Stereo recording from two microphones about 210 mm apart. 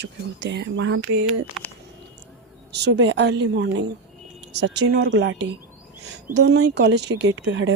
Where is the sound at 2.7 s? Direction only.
55° right (ahead or behind).